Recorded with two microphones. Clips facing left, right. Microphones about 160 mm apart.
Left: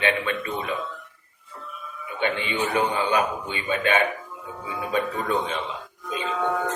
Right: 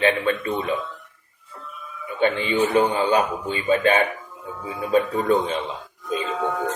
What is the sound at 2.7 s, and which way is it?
Speech, 30° right (ahead or behind).